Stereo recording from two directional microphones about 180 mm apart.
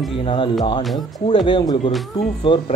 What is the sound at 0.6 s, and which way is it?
Speech, 25° left (ahead or behind).